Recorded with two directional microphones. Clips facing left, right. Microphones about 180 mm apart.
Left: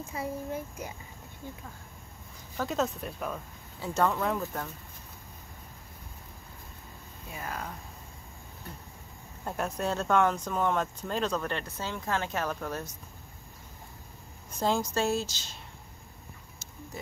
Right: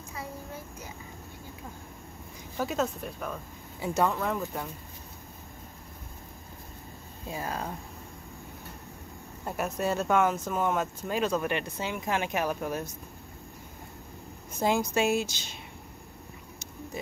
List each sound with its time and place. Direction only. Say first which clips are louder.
2.5 s speech: right 1 dB; 5° right (ahead or behind)
3.8 s speech: right 1 dB; 10° right (ahead or behind)
4.1 s speech: even; centre (ahead or behind)
7.2 s speech: right 4 dB; 30° right (ahead or behind)
9.4 s speech: right 1 dB; 5° right (ahead or behind)
14.6 s speech: right 2 dB; 10° right (ahead or behind)